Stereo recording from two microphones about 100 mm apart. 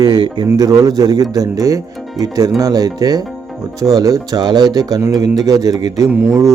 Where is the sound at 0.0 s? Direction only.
45° right (ahead or behind).